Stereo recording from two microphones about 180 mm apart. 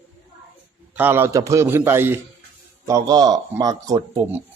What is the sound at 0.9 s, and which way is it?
A man's voice, 10° right (ahead or behind).